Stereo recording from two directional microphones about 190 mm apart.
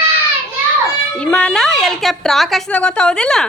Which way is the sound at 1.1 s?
5° left (ahead or behind).